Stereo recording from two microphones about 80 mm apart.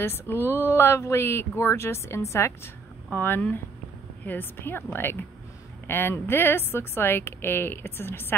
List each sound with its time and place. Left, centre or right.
0.0 s a woman's voice: left